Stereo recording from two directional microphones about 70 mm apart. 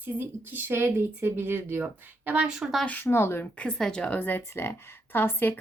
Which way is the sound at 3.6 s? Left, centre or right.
Centre.